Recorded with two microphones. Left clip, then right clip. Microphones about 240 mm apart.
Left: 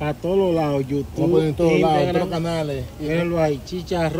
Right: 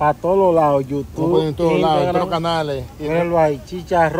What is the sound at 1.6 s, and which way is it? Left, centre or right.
A man's voice, centre.